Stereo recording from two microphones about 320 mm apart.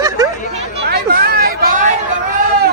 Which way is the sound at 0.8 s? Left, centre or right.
Right.